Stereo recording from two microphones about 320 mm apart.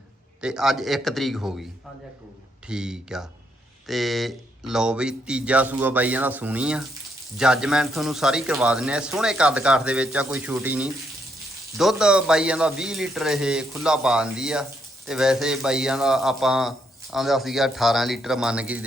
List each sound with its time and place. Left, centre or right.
0.4 s speech: centre
2.6 s speech: centre